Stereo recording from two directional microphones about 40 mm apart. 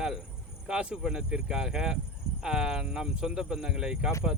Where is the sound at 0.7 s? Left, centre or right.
Right.